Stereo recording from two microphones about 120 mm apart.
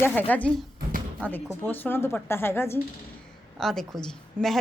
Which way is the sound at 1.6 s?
15° left (ahead or behind).